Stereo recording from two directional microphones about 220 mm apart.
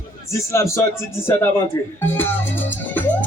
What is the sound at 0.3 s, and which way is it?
Speech, 15° left (ahead or behind).